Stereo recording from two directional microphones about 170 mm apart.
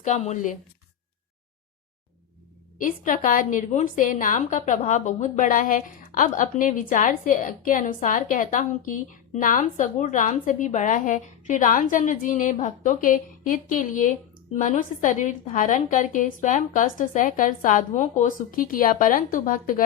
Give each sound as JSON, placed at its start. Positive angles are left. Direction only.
{"t": 0.0, "sound": "a woman's voice", "side_deg": 45}
{"t": 2.7, "sound": "a woman's voice", "side_deg": 50}